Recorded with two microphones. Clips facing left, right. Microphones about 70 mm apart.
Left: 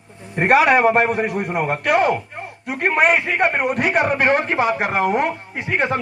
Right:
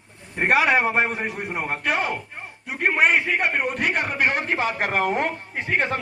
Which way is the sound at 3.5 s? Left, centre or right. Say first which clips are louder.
Left 4 dB; left.